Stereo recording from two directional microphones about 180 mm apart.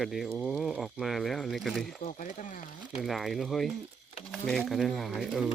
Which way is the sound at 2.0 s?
45° left (ahead or behind).